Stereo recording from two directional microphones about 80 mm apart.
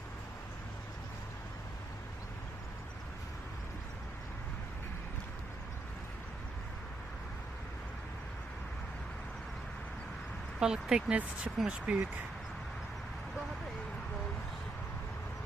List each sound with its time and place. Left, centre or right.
10.6 s speech: centre